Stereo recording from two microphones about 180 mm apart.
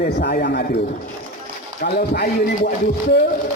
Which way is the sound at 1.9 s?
65° left (ahead or behind).